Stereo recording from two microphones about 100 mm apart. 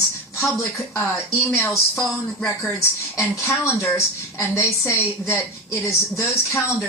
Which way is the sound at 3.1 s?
25° left (ahead or behind).